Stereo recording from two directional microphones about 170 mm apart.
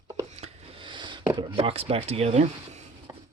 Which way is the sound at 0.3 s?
40° right (ahead or behind).